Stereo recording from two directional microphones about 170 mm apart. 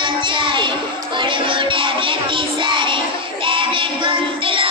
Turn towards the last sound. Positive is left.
turn(degrees=-30)  # may be behind; listen again after turning